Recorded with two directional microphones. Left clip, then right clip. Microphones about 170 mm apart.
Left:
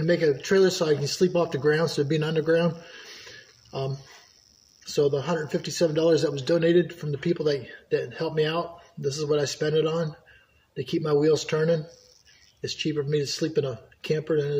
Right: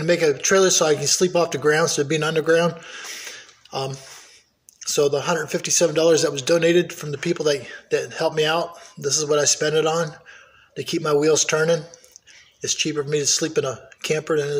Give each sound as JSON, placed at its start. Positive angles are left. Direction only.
{"t": 0.0, "sound": "a man's voice", "side_deg": 25}